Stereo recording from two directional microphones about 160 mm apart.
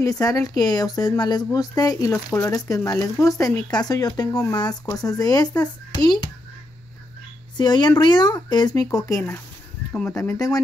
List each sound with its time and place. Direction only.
0.0 s a child's voice: 20° left (ahead or behind)
7.5 s speech: 25° left (ahead or behind)